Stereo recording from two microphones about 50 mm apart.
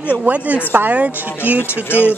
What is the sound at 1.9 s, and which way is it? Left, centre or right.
Speech, left.